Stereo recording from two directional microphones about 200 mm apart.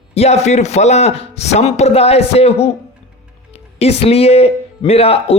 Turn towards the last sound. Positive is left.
turn(degrees=30)  # may be behind; listen again after turning